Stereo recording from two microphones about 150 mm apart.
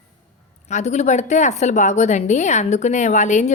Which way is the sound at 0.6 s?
50° left (ahead or behind).